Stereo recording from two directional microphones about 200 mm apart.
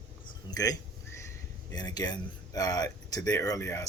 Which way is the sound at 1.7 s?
20° left (ahead or behind).